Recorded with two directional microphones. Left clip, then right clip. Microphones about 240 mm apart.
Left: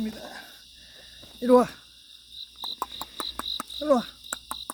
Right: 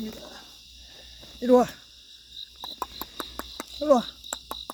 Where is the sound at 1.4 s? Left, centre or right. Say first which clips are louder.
Even; centre.